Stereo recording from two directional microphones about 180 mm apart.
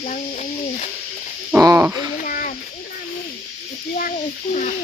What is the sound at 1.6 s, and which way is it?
Hoot, 15° right (ahead or behind).